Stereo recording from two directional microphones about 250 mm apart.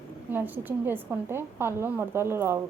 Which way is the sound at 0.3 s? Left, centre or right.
Centre.